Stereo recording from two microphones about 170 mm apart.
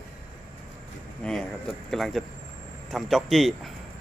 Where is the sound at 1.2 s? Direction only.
5° left (ahead or behind).